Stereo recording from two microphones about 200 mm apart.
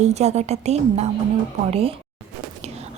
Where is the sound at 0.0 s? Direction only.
35° right (ahead or behind).